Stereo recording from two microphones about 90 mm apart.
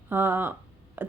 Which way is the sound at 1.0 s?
20° right (ahead or behind).